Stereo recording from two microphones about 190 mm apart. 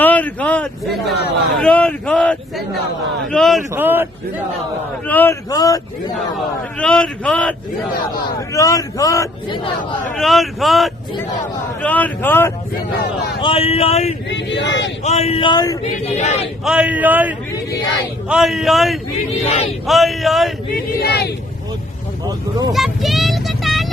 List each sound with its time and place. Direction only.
0.0 s a man's voice: 10° left (ahead or behind)
3.8 s a man's voice: 10° right (ahead or behind)
5.0 s speech: 10° left (ahead or behind)
6.7 s a man's voice: 5° left (ahead or behind)
8.4 s speech: 15° left (ahead or behind)
10.2 s a man's voice: centre (ahead or behind)
13.4 s speech: 30° left (ahead or behind)
14.3 s speech: 70° left (ahead or behind)
15.0 s speech: 35° left (ahead or behind)
15.8 s speech: 35° left (ahead or behind)
16.6 s a man's voice: 5° right (ahead or behind)
20.7 s speech: 55° left (ahead or behind)
22.3 s speech: 20° right (ahead or behind)
22.7 s vehicle: centre (ahead or behind)